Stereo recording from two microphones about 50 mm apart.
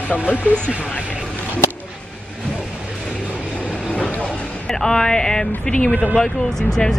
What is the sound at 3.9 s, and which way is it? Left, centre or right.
Vehicle, left.